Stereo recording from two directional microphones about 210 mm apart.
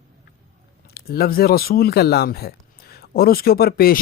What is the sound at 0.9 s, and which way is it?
Speech, 45° left (ahead or behind).